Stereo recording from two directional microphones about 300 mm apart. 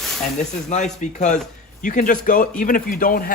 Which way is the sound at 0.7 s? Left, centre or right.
Left.